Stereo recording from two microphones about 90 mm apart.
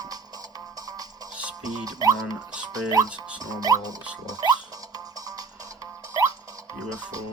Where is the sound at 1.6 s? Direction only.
45° right (ahead or behind).